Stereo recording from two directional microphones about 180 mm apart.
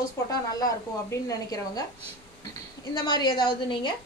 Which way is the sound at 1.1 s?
20° left (ahead or behind).